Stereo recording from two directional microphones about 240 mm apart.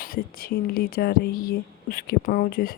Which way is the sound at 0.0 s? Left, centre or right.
Left.